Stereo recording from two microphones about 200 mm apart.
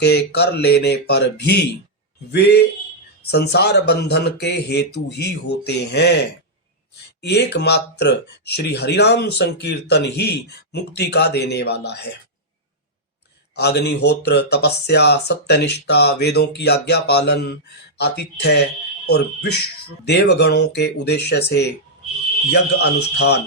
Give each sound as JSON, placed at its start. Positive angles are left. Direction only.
{"t": 0.0, "sound": "speech", "side_deg": 55}
{"t": 7.2, "sound": "speech", "side_deg": 55}
{"t": 13.6, "sound": "speech", "side_deg": 55}